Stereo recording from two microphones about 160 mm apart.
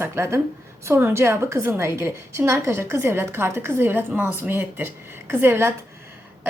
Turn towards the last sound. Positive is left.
turn(degrees=-15)  # may be behind; listen again after turning